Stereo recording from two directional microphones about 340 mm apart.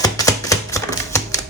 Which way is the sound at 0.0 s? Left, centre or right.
Centre.